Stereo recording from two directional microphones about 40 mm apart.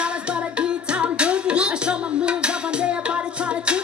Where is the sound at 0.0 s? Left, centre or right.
Right.